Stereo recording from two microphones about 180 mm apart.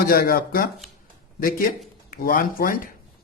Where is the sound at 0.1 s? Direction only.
55° left (ahead or behind).